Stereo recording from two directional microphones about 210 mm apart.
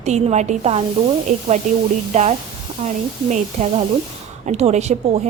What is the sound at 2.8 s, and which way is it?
A woman's voice, 30° right (ahead or behind).